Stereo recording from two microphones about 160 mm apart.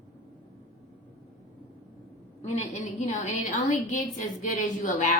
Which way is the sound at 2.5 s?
45° left (ahead or behind).